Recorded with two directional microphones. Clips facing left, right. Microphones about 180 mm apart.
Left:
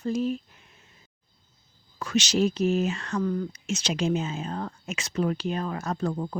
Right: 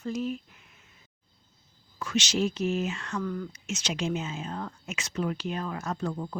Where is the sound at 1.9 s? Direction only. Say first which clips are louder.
Left 4 dB; 40° left (ahead or behind).